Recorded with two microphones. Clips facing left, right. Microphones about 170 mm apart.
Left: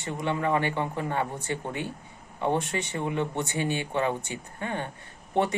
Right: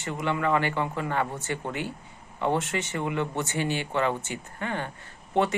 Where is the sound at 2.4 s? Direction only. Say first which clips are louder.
Even; 15° left (ahead or behind).